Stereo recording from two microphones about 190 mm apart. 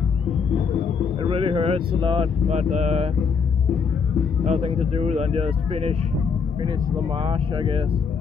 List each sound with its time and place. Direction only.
1.2 s speech: 25° right (ahead or behind)
4.5 s speech: 30° right (ahead or behind)
7.2 s speech: 25° right (ahead or behind)